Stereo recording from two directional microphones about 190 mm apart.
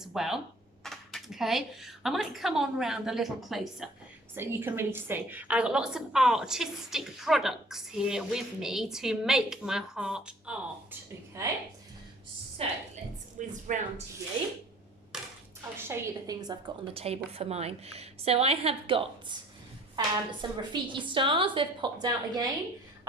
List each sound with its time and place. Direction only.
0.0 s a woman's voice: centre (ahead or behind)
4.4 s a woman's voice: 10° right (ahead or behind)
11.4 s a woman's voice: 15° right (ahead or behind)
12.6 s a woman's voice: 30° right (ahead or behind)
15.1 s a sound: 5° right (ahead or behind)
15.8 s a woman's voice: 15° right (ahead or behind)